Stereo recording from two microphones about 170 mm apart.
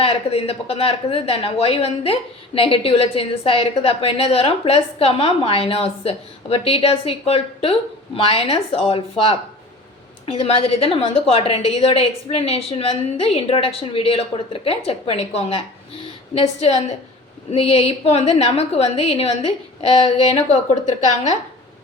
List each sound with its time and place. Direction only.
0.0 s a woman's voice: 35° left (ahead or behind)